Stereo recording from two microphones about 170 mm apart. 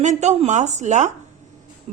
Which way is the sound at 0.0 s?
45° right (ahead or behind).